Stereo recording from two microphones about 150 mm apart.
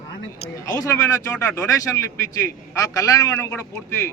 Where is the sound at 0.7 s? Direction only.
25° left (ahead or behind).